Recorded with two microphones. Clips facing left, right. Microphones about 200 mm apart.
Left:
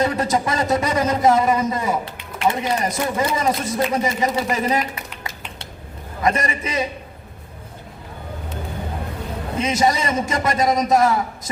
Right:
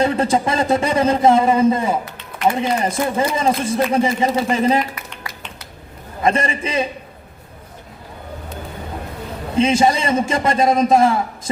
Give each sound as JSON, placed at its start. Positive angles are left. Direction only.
{"t": 0.0, "sound": "speech", "side_deg": -30}
{"t": 6.2, "sound": "speech", "side_deg": -30}
{"t": 9.6, "sound": "speech", "side_deg": -30}